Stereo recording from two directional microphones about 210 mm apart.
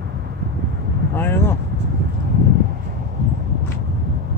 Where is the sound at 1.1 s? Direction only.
10° left (ahead or behind).